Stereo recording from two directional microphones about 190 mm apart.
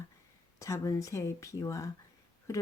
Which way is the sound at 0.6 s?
15° left (ahead or behind).